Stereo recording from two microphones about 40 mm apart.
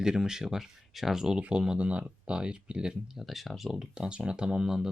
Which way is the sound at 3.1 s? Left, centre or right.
Centre.